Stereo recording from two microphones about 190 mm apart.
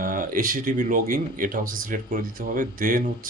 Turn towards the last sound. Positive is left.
turn(degrees=-45)  # may be behind; listen again after turning